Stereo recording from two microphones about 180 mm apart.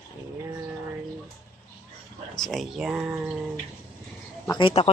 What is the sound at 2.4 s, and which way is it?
Speech, centre (ahead or behind).